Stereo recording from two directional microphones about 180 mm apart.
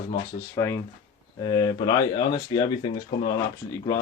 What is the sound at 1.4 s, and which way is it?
Speech, 25° left (ahead or behind).